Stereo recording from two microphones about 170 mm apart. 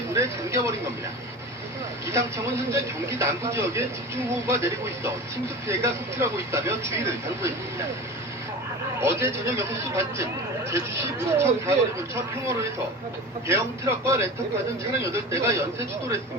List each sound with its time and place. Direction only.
0.1 s speech: 15° right (ahead or behind)
2.7 s speech: 15° right (ahead or behind)
9.0 s speech: 15° right (ahead or behind)